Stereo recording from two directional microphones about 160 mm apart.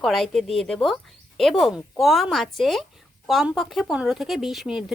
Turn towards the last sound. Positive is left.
turn(degrees=-5)  # may be behind; listen again after turning